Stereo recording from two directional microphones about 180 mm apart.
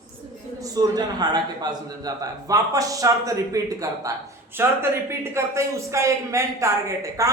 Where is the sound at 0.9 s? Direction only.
20° right (ahead or behind).